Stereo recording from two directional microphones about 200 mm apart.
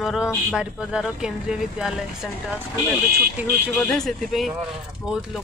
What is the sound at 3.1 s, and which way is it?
Speech, 50° right (ahead or behind).